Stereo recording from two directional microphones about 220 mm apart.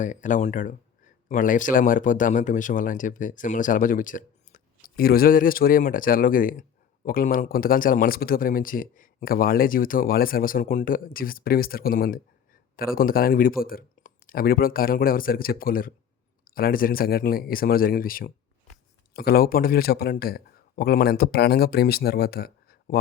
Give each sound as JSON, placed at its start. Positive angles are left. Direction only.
{"t": 0.0, "sound": "a man's voice", "side_deg": 35}